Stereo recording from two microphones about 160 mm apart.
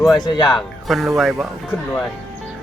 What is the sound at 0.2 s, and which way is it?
Speech, 25° left (ahead or behind).